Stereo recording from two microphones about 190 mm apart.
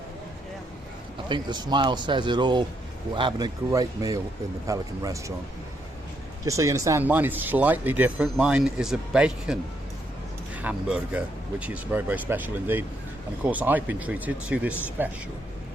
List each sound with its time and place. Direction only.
1.3 s speech: 25° right (ahead or behind)
6.4 s speech: 15° right (ahead or behind)